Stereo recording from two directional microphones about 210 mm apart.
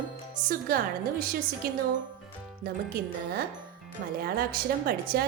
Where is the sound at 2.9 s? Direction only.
45° right (ahead or behind).